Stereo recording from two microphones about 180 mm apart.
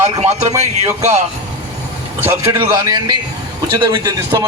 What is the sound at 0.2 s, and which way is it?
Speech, 35° right (ahead or behind).